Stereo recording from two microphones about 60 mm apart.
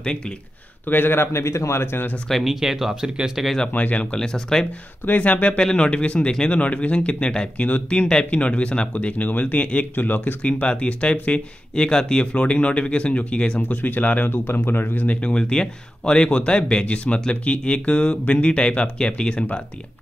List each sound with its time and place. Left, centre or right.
0.8 s a man's voice: left
2.2 s speech: centre
3.6 s speech: left
5.0 s speech: left
13.6 s a man's voice: left
15.0 s speech: centre